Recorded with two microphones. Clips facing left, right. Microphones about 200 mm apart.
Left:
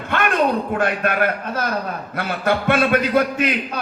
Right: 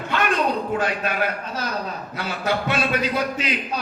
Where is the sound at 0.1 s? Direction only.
55° left (ahead or behind).